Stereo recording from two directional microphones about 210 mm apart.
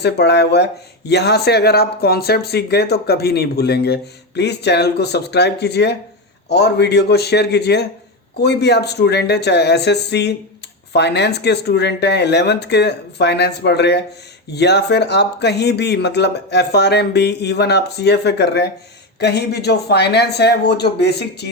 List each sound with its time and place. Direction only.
0.0 s speech: 50° left (ahead or behind)